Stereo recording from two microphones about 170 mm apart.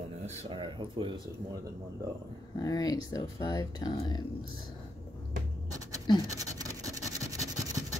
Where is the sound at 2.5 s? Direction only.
25° left (ahead or behind).